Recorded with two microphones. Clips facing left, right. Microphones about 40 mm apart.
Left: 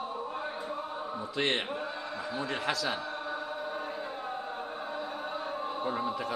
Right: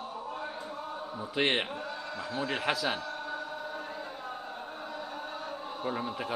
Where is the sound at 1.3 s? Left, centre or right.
Right.